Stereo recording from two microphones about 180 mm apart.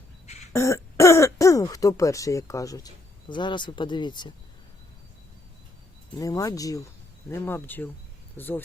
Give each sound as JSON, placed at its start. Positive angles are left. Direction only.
{"t": 0.5, "sound": "speech", "side_deg": 15}
{"t": 6.1, "sound": "speech", "side_deg": 20}